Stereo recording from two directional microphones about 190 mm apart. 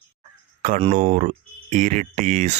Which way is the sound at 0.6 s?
45° right (ahead or behind).